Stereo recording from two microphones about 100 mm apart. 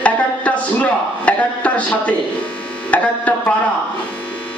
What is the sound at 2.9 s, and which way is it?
Speech, 15° left (ahead or behind).